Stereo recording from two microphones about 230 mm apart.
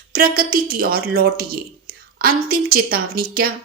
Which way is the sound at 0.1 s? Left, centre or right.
Right.